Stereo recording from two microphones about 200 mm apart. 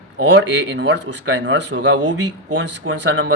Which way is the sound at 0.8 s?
65° right (ahead or behind).